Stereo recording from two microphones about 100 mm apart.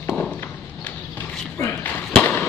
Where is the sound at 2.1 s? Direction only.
15° left (ahead or behind).